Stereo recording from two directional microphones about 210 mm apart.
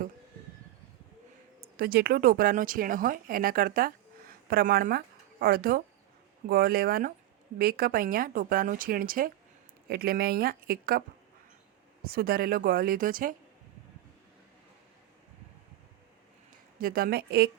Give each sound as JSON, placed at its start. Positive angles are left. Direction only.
{"t": 1.6, "sound": "speech", "side_deg": -45}
{"t": 12.0, "sound": "speech", "side_deg": -45}
{"t": 16.8, "sound": "speech", "side_deg": -45}